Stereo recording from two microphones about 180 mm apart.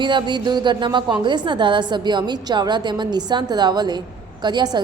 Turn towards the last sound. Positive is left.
turn(degrees=-25)  # may be behind; listen again after turning